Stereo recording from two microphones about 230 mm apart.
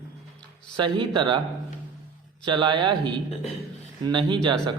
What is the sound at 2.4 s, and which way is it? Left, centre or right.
Speech, centre.